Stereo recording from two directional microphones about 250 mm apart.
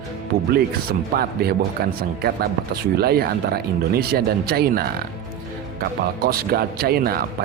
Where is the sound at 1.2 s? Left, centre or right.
Right.